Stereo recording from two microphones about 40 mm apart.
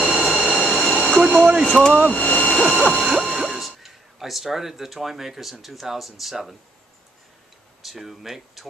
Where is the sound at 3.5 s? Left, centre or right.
Centre.